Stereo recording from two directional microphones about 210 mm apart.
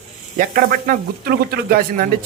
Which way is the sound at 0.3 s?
45° right (ahead or behind).